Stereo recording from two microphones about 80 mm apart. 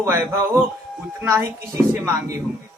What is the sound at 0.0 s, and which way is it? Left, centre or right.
A man's voice, right.